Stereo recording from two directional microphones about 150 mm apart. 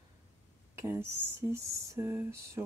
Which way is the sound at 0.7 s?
15° right (ahead or behind).